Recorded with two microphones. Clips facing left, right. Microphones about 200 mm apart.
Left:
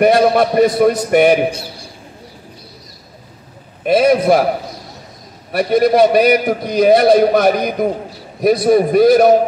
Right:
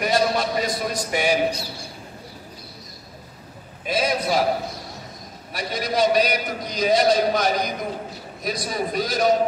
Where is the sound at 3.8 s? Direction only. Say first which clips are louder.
Left 12 dB; 60° left (ahead or behind).